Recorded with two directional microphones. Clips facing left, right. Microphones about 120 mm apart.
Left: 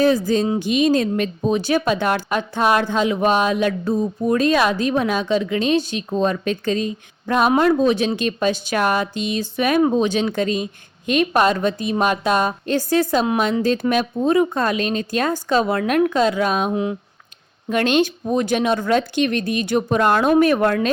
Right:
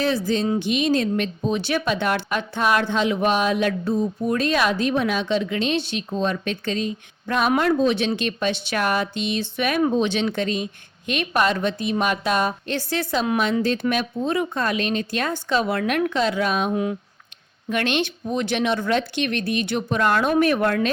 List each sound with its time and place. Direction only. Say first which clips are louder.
0.0 s speech: left 5 dB; 40° left (ahead or behind)
7.5 s speech: left 3 dB; 20° left (ahead or behind)
7.8 s speech: left 3 dB; 40° left (ahead or behind)
16.7 s speech: left 2 dB; 25° left (ahead or behind)
17.7 s speech: left 5 dB; 35° left (ahead or behind)